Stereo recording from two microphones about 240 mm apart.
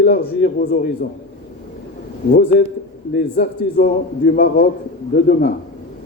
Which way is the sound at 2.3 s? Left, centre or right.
Left.